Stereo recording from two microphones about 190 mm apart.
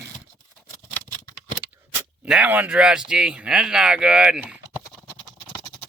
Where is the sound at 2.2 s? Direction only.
5° right (ahead or behind).